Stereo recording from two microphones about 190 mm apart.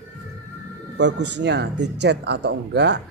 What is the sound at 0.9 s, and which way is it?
Speech, 65° right (ahead or behind).